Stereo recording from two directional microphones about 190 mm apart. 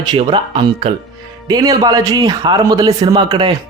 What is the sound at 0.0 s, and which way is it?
A man's voice, 25° right (ahead or behind).